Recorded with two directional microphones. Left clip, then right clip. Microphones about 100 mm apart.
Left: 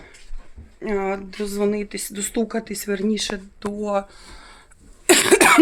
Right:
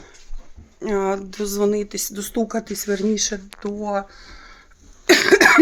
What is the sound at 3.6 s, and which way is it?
Speech, 15° left (ahead or behind).